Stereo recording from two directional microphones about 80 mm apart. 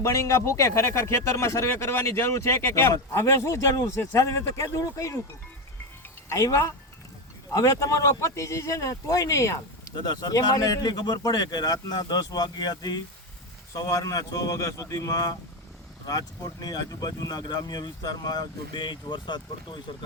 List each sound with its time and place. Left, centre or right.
0.0 s speech: left
6.2 s speech: left
10.0 s speech: left
13.7 s speech: left